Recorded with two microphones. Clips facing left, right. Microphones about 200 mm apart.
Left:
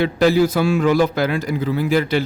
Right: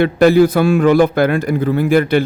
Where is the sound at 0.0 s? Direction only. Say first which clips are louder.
Right 5 dB; 55° right (ahead or behind).